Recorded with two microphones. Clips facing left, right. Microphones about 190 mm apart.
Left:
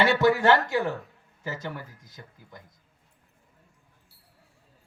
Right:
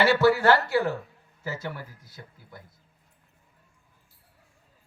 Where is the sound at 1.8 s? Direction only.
10° right (ahead or behind).